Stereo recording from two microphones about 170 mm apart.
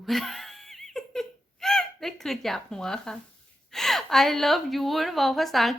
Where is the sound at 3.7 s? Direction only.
Centre (ahead or behind).